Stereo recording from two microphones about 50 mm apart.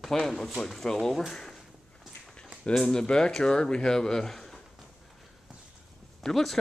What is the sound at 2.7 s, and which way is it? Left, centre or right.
Speech, centre.